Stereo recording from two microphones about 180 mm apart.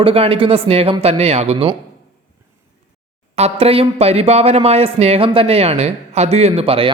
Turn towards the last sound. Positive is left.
turn(degrees=-30)  # may be behind; listen again after turning